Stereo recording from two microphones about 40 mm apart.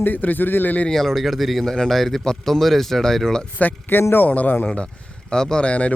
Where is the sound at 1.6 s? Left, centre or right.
Centre.